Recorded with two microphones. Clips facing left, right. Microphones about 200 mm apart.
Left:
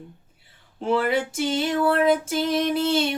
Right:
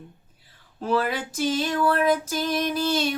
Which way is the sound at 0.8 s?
25° left (ahead or behind).